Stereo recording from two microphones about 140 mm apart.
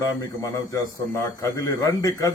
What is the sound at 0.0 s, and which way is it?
Speech, 20° left (ahead or behind).